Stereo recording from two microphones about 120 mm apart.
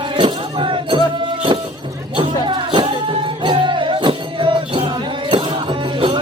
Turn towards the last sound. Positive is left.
turn(degrees=-45)  # may be behind; listen again after turning